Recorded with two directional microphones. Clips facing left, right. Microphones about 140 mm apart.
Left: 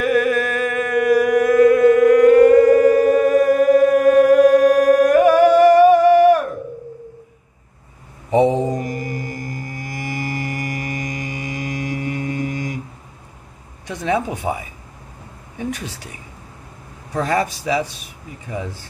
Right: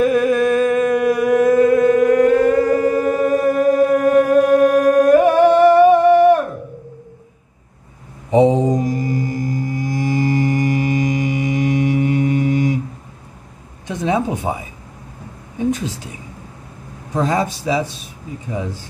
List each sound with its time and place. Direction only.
0.0 s humming: 25° right (ahead or behind)
8.3 s mantra: 20° right (ahead or behind)
13.8 s a sound: 20° right (ahead or behind)
15.7 s speech: 20° right (ahead or behind)
17.1 s speech: 20° right (ahead or behind)